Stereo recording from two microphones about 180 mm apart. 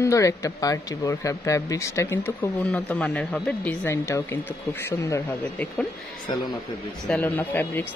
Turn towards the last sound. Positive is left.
turn(degrees=10)  # may be behind; listen again after turning